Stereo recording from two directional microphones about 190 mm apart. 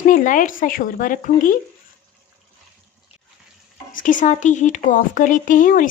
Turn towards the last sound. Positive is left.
turn(degrees=45)  # may be behind; listen again after turning